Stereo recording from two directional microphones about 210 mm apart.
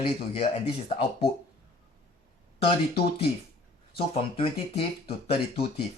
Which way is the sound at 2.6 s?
25° left (ahead or behind).